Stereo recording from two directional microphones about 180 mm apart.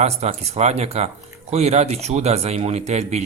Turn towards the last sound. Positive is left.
turn(degrees=-40)  # may be behind; listen again after turning